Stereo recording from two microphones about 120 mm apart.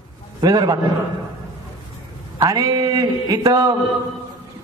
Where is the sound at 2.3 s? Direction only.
35° right (ahead or behind).